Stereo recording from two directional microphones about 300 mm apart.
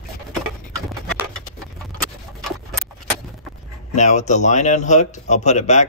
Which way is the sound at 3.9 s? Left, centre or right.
Left.